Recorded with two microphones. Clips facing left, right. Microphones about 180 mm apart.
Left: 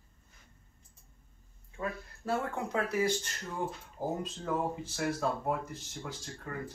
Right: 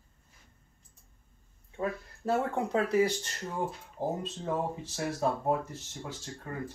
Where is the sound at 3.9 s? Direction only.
25° right (ahead or behind).